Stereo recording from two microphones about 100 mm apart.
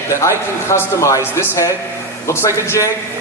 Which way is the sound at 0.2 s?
30° left (ahead or behind).